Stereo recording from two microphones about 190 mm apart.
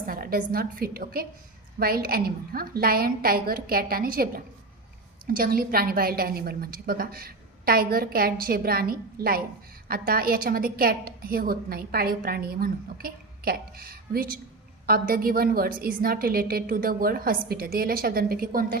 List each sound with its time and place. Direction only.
0.1 s a woman's voice: 50° right (ahead or behind)
5.3 s a woman's voice: 50° right (ahead or behind)